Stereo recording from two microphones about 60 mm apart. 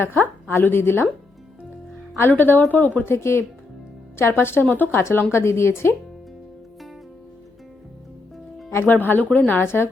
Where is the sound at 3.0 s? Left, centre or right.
Left.